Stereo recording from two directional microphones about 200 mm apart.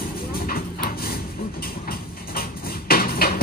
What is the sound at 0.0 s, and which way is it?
Vehicle, 45° left (ahead or behind).